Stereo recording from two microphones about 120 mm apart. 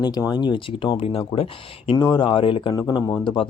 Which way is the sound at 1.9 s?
35° left (ahead or behind).